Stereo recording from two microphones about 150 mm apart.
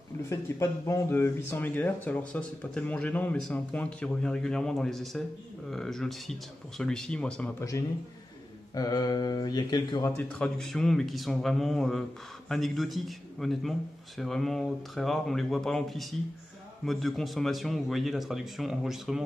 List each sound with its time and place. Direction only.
0.3 s a man's voice: 20° left (ahead or behind)
8.7 s speech: 25° left (ahead or behind)
10.1 s a man's voice: 5° left (ahead or behind)